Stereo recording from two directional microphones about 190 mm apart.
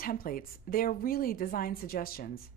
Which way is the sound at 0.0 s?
50° left (ahead or behind).